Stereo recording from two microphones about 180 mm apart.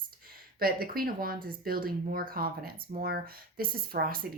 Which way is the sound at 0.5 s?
55° right (ahead or behind).